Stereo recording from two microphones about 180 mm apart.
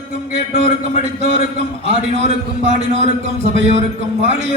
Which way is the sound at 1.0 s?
35° right (ahead or behind).